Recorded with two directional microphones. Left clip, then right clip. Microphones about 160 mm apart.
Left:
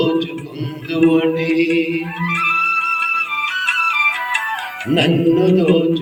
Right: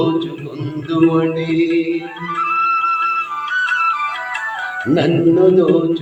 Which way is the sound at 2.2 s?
20° left (ahead or behind).